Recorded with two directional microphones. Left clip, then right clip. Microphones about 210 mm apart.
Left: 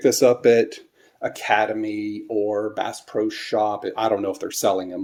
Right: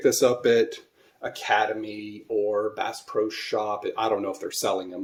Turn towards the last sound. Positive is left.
turn(degrees=35)  # may be behind; listen again after turning